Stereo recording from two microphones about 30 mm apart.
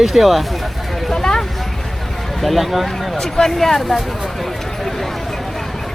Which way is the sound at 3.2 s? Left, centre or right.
Centre.